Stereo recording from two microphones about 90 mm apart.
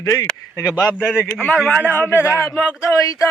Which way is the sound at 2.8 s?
35° left (ahead or behind).